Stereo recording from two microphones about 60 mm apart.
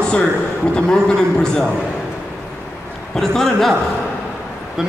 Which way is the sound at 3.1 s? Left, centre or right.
Centre.